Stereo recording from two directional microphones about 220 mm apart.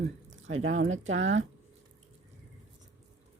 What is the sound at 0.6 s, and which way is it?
Speech, 60° right (ahead or behind).